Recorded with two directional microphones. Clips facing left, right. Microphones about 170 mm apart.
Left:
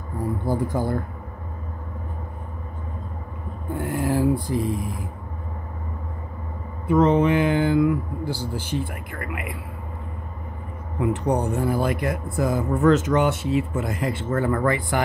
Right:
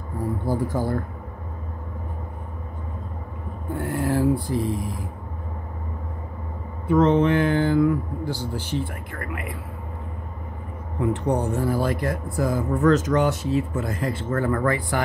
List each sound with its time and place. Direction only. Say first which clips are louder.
0.5 s speech: even; 15° left (ahead or behind)
3.7 s speech: even; 15° left (ahead or behind)
6.9 s speech: even; 10° left (ahead or behind)
11.0 s speech: left 1 dB; 15° left (ahead or behind)